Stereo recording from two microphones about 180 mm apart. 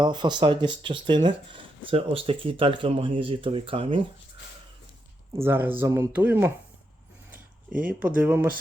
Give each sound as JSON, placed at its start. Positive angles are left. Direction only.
{"t": 0.0, "sound": "speech", "side_deg": -25}
{"t": 5.4, "sound": "speech", "side_deg": -15}
{"t": 7.9, "sound": "speech", "side_deg": -10}